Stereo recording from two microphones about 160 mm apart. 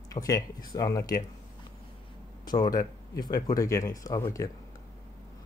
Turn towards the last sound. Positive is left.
turn(degrees=15)  # may be behind; listen again after turning